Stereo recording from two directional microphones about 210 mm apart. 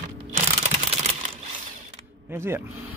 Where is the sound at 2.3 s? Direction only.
10° right (ahead or behind).